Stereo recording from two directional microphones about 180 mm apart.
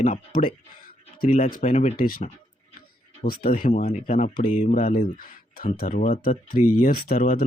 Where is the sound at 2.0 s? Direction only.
55° left (ahead or behind).